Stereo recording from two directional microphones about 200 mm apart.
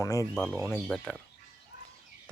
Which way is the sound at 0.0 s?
15° left (ahead or behind).